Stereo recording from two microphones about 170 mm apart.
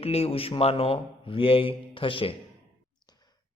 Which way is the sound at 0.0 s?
35° left (ahead or behind).